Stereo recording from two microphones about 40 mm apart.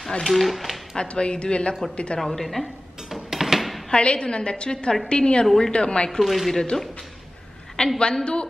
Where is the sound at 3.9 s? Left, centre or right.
Left.